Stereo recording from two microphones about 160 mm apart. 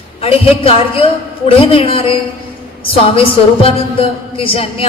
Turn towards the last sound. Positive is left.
turn(degrees=35)  # may be behind; listen again after turning